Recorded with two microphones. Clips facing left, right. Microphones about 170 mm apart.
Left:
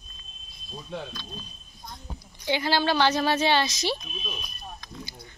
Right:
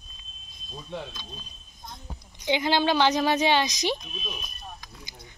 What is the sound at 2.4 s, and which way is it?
Speech, 20° right (ahead or behind).